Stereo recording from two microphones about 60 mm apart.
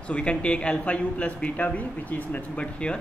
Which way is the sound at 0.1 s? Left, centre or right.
Centre.